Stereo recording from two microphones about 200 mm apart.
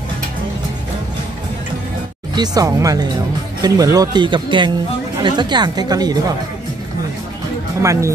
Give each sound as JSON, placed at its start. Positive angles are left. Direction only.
{"t": 2.3, "sound": "speech", "side_deg": -20}
{"t": 7.8, "sound": "speech", "side_deg": -15}